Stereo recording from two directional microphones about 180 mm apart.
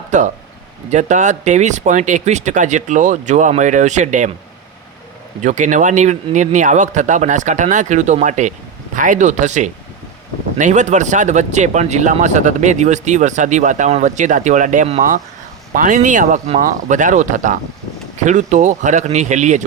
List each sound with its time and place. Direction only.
0.1 s speech: 40° right (ahead or behind)
5.4 s speech: 45° right (ahead or behind)